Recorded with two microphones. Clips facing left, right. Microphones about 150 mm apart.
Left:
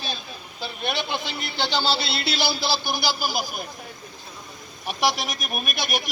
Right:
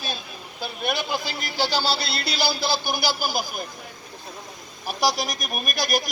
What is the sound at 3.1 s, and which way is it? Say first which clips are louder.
Speech: left 1 dB; 50° right (ahead or behind).